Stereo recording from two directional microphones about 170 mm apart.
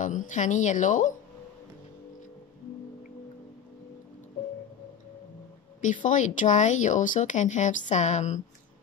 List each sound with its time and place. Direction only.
0.0 s speech: 50° left (ahead or behind)
5.8 s speech: 50° left (ahead or behind)